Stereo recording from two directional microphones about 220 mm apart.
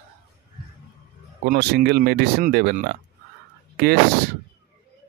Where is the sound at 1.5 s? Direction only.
45° right (ahead or behind).